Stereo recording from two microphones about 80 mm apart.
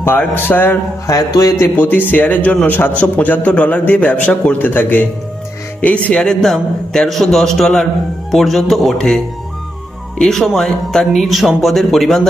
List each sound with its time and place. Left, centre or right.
0.2 s a man's voice: left
1.0 s speech: left
1.8 s a man's voice: left
6.2 s speech: centre